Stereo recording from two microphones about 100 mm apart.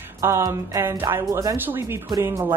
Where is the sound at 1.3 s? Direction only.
35° right (ahead or behind).